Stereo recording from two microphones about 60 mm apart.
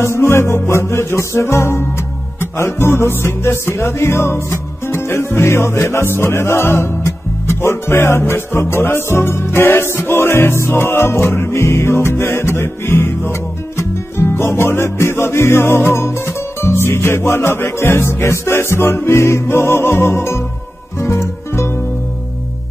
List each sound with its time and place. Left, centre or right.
0.0 s music: left